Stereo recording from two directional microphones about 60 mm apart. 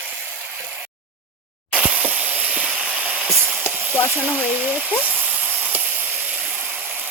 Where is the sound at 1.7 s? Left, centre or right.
Right.